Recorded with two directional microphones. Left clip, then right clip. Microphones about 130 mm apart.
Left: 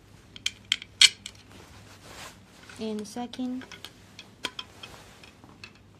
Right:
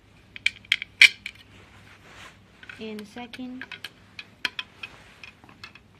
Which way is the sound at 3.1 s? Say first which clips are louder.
Left 3 dB; 50° left (ahead or behind).